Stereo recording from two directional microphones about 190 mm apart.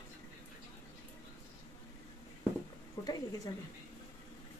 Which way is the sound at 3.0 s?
20° left (ahead or behind).